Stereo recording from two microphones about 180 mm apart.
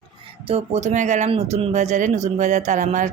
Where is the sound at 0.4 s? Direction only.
35° right (ahead or behind).